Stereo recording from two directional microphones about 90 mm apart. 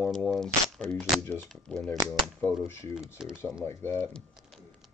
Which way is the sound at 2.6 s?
30° left (ahead or behind).